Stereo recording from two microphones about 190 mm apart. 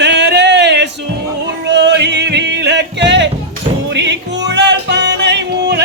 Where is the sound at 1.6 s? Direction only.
65° right (ahead or behind).